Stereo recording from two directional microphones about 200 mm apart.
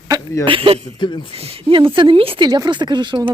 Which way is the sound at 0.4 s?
25° right (ahead or behind).